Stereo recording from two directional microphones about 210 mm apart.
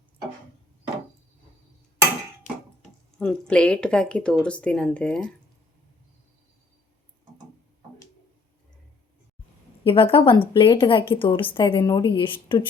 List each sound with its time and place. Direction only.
2.5 s a sound: 35° left (ahead or behind)
3.2 s speech: 5° left (ahead or behind)
9.8 s a woman's voice: 25° left (ahead or behind)